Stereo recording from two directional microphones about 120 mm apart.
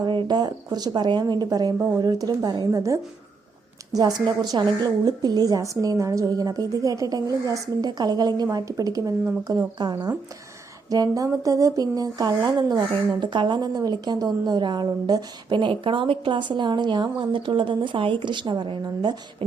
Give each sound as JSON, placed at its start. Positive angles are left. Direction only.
{"t": 0.0, "sound": "speech", "side_deg": -40}